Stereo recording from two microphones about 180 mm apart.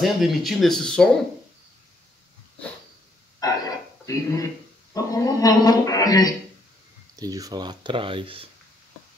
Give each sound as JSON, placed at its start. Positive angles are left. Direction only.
{"t": 0.0, "sound": "speech", "side_deg": 0}
{"t": 3.3, "sound": "a sound", "side_deg": 20}
{"t": 4.9, "sound": "speech", "side_deg": 20}
{"t": 7.2, "sound": "speech", "side_deg": -20}